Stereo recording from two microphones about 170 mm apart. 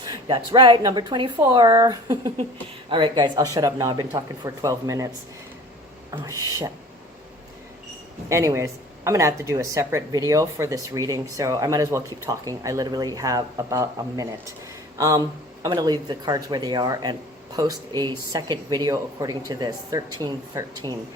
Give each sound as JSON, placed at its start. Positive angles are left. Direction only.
{"t": 0.0, "sound": "speech", "side_deg": -25}
{"t": 6.1, "sound": "speech", "side_deg": -20}
{"t": 8.3, "sound": "speech", "side_deg": -15}